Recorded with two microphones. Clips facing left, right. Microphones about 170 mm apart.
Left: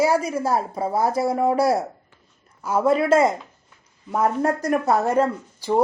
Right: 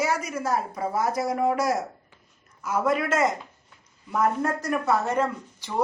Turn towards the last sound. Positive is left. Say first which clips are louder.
# left 9 dB
turn(degrees=35)  # may be behind; listen again after turning